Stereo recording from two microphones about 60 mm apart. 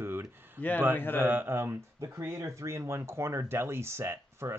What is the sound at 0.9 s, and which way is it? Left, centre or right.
Speech, left.